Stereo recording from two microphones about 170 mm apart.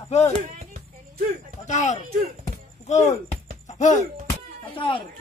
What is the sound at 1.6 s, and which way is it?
Speech, 45° left (ahead or behind).